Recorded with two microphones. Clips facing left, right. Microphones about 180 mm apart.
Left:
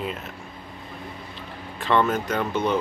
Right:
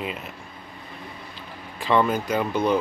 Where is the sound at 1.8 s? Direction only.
5° right (ahead or behind).